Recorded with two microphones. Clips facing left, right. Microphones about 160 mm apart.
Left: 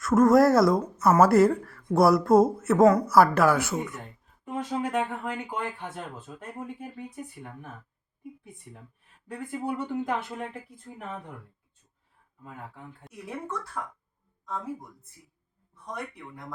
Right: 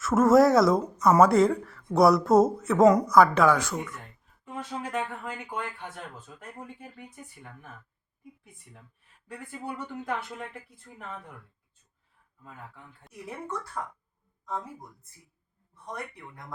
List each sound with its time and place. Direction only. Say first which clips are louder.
0.0 s speech: even; 5° right (ahead or behind)
2.8 s a woman's voice: even; 15° right (ahead or behind)
3.1 s a woman's voice: even; 5° left (ahead or behind); by 7.5 s 35° left (ahead or behind)
9.5 s speech: left 6 dB; 20° left (ahead or behind)
12.4 s speech: left 4 dB; 20° left (ahead or behind)
13.0 s speech: left 2 dB; centre (ahead or behind)